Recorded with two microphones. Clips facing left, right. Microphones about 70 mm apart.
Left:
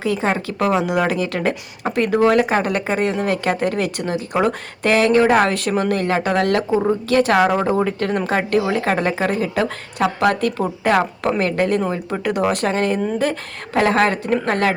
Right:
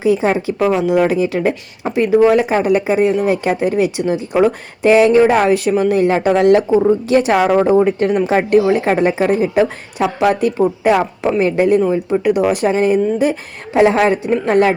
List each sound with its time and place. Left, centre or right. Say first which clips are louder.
0.0 s a woman's voice: right 6 dB; centre
0.7 s a woman's voice: right 4 dB; centre